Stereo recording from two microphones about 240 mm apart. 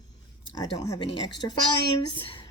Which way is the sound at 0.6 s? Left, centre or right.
Centre.